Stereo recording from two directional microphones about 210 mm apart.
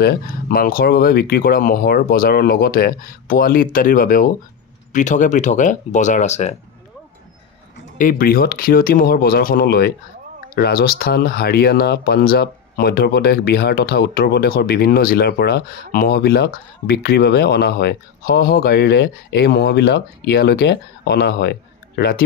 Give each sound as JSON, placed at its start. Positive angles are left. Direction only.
{"t": 0.0, "sound": "speech", "side_deg": 45}
{"t": 8.0, "sound": "speech", "side_deg": 45}